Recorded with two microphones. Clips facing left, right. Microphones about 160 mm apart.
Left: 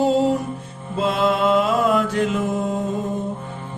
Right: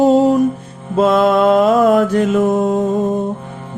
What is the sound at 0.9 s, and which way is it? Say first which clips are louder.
Mantra: right 8 dB; 50° right (ahead or behind).